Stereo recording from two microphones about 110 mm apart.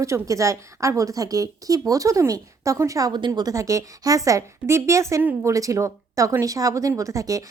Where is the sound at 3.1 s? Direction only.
40° right (ahead or behind).